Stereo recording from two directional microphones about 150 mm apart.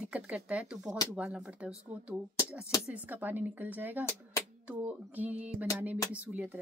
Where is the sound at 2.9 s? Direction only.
10° right (ahead or behind).